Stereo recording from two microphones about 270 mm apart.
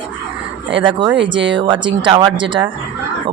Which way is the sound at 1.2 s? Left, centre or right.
Right.